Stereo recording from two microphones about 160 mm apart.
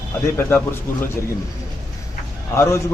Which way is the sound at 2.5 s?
15° left (ahead or behind).